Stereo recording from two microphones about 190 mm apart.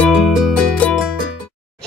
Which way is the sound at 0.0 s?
Centre (ahead or behind).